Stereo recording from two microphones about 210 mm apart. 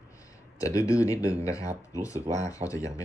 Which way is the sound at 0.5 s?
15° left (ahead or behind).